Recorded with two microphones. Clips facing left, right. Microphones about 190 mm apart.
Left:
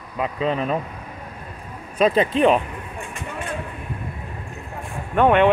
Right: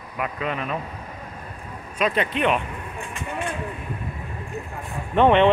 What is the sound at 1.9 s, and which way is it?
Speech, 35° left (ahead or behind).